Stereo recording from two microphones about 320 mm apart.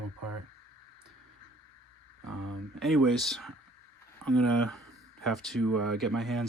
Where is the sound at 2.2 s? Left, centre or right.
Right.